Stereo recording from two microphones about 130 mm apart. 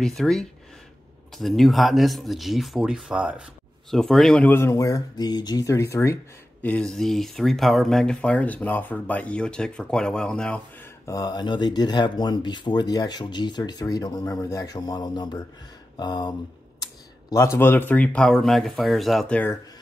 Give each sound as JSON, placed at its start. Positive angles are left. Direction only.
{"t": 0.0, "sound": "speech", "side_deg": 5}
{"t": 3.9, "sound": "speech", "side_deg": 0}
{"t": 4.5, "sound": "speech", "side_deg": 20}
{"t": 6.6, "sound": "speech", "side_deg": 10}
{"t": 11.1, "sound": "speech", "side_deg": 30}
{"t": 16.8, "sound": "speech", "side_deg": 25}